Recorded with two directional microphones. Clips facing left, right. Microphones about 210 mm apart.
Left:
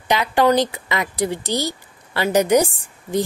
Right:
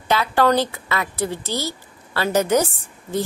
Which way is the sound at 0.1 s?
15° left (ahead or behind).